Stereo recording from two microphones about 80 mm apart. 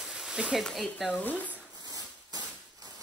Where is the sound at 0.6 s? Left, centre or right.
Centre.